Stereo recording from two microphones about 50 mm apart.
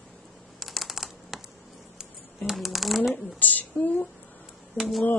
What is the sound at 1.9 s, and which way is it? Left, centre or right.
Shuffling cards, centre.